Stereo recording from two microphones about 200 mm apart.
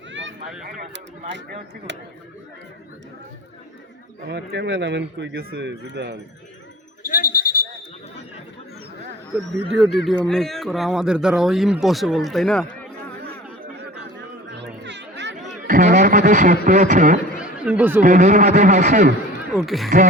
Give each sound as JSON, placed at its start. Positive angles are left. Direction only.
{"t": 0.1, "sound": "a sound", "side_deg": -65}
{"t": 1.9, "sound": "speech", "side_deg": -65}
{"t": 4.3, "sound": "speech", "side_deg": -55}
{"t": 7.0, "sound": "a sound", "side_deg": 45}
{"t": 9.7, "sound": "speech", "side_deg": 0}
{"t": 14.2, "sound": "chatter", "side_deg": -60}
{"t": 15.6, "sound": "a sound", "side_deg": -40}
{"t": 16.6, "sound": "a man's voice", "side_deg": -40}
{"t": 17.4, "sound": "chatter", "side_deg": -5}
{"t": 18.0, "sound": "a man's voice", "side_deg": -40}
{"t": 19.5, "sound": "speech", "side_deg": 0}